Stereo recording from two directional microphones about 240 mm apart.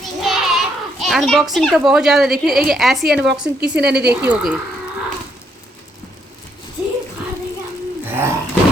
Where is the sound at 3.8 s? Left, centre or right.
Right.